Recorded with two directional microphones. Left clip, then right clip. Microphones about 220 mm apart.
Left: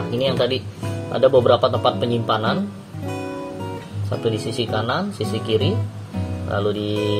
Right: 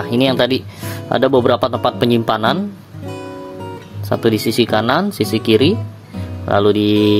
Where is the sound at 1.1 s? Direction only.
50° right (ahead or behind).